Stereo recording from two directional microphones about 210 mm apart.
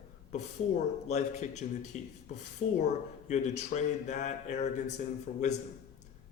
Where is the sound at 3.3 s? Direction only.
35° left (ahead or behind).